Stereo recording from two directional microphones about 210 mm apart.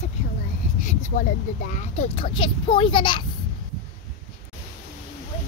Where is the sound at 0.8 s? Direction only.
40° left (ahead or behind); by 3.3 s 25° left (ahead or behind).